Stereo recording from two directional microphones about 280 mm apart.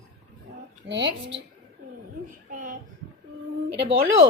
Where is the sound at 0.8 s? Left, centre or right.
Right.